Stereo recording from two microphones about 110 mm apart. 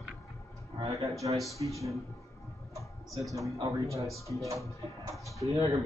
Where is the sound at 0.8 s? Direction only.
30° right (ahead or behind).